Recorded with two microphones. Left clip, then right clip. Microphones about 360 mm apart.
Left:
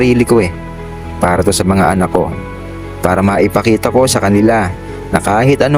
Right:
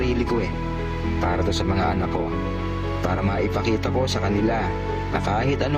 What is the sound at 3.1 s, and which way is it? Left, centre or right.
Speech, left.